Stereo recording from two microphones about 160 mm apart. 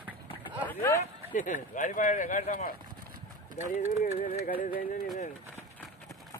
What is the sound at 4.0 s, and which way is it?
Music, 60° left (ahead or behind).